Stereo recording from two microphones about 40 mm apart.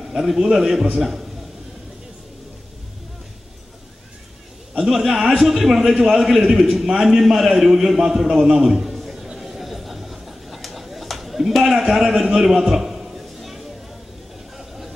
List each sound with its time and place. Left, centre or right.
0.0 s a man's voice: centre
4.7 s a man's voice: centre
7.0 s a sound: centre